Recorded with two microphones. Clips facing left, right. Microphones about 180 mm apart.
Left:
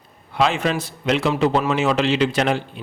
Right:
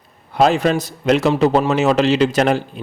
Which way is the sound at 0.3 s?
40° right (ahead or behind).